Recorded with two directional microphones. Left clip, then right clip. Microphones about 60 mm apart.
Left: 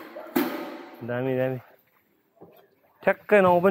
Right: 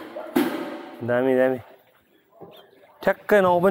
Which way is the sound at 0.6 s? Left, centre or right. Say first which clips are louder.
Right 4 dB; left.